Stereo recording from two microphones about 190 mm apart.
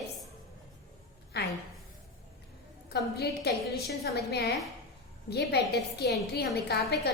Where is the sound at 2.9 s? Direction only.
60° left (ahead or behind).